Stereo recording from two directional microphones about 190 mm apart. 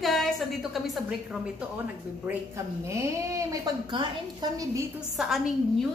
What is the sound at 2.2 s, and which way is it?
A man's voice, 15° right (ahead or behind).